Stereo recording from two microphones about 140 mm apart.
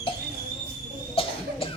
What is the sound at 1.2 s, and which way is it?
Cough, 40° left (ahead or behind).